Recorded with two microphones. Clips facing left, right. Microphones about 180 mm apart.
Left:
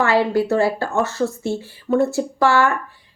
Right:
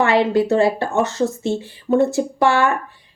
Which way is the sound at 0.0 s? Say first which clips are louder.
Right 2 dB; 20° right (ahead or behind).